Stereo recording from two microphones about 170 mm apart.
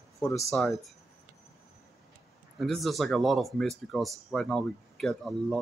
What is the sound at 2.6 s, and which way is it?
Speech, centre (ahead or behind).